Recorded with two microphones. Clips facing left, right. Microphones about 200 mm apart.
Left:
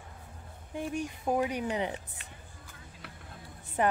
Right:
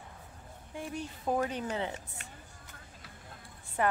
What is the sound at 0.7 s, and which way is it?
Speech, 15° left (ahead or behind).